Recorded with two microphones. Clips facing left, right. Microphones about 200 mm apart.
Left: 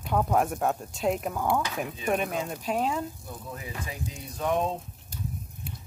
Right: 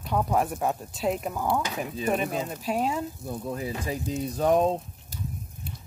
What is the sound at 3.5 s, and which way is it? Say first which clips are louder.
Speech: right 7 dB; 35° right (ahead or behind).